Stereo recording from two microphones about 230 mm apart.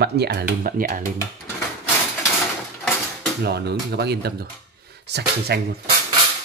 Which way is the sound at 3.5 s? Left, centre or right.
Right.